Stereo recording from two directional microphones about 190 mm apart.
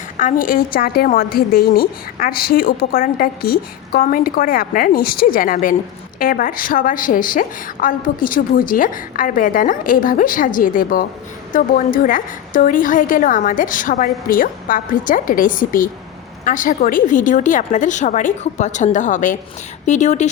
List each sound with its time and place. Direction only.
0.2 s a woman's voice: 45° left (ahead or behind)